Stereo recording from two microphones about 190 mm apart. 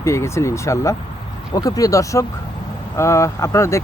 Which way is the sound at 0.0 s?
15° left (ahead or behind).